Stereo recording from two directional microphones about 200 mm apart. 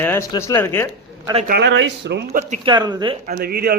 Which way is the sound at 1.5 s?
60° right (ahead or behind).